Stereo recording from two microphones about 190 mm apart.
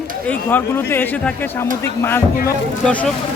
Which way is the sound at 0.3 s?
10° left (ahead or behind).